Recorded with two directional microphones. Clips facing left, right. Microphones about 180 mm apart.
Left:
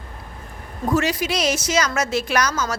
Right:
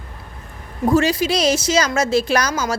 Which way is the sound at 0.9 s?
30° right (ahead or behind).